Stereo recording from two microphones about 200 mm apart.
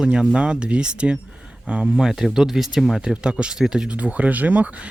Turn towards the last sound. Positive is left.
turn(degrees=-5)  # may be behind; listen again after turning